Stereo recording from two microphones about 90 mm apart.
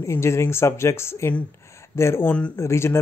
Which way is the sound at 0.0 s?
30° left (ahead or behind).